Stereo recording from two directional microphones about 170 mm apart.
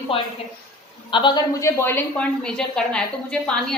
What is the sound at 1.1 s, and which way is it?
A woman's voice, 25° left (ahead or behind).